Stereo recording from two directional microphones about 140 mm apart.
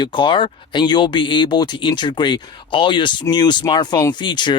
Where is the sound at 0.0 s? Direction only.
35° left (ahead or behind).